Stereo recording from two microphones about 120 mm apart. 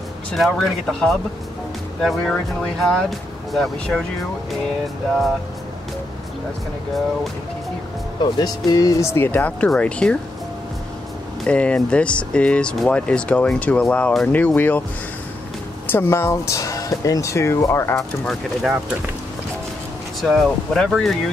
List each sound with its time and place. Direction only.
0.3 s speech: centre (ahead or behind)
8.2 s speech: 35° left (ahead or behind); by 10.1 s 10° left (ahead or behind)
11.4 s speech: 10° left (ahead or behind)
15.9 s speech: 20° left (ahead or behind)
18.2 s speech: centre (ahead or behind)
20.2 s speech: centre (ahead or behind)